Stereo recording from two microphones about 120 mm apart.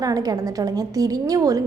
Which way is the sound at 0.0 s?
30° right (ahead or behind).